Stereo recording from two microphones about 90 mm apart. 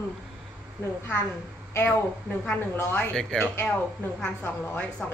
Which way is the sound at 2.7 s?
25° left (ahead or behind).